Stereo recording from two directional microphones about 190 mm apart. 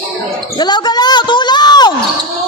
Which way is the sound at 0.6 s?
20° left (ahead or behind).